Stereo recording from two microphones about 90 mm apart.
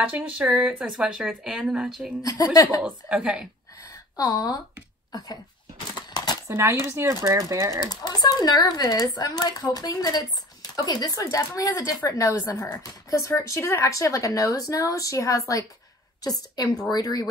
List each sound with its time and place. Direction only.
0.4 s speech: 15° right (ahead or behind)
2.2 s speech: 40° left (ahead or behind)
2.8 s speech: 10° right (ahead or behind)
4.2 s speech: 45° left (ahead or behind)
5.9 s a sound: 50° left (ahead or behind)
6.4 s speech: 30° right (ahead or behind)
7.9 s a woman's voice: 50° left (ahead or behind)